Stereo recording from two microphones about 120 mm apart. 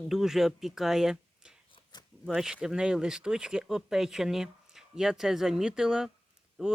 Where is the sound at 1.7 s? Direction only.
35° left (ahead or behind).